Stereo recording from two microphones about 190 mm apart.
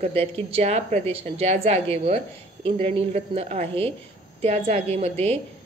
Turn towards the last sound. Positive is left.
turn(degrees=-35)  # may be behind; listen again after turning